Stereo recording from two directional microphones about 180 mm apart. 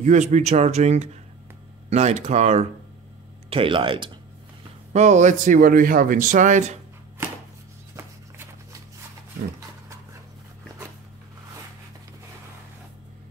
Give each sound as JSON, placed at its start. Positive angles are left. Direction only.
{"t": 0.0, "sound": "speech", "side_deg": -40}
{"t": 4.9, "sound": "speech", "side_deg": -40}